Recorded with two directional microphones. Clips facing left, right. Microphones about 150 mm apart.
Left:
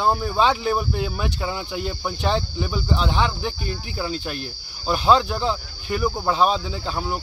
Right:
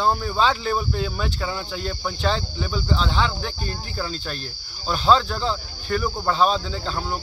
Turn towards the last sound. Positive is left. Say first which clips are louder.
# left 1 dB
turn(degrees=10)  # may be behind; listen again after turning